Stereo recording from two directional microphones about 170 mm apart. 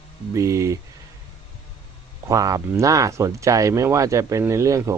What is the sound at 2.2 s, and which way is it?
Speech, 20° right (ahead or behind).